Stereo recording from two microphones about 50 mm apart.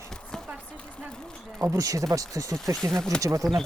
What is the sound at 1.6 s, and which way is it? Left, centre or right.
Speech, right.